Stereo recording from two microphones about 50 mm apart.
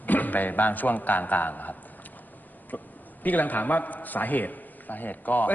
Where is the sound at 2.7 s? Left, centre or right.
Left.